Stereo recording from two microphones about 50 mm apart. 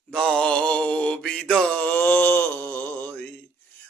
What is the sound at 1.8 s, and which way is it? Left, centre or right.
Music, left.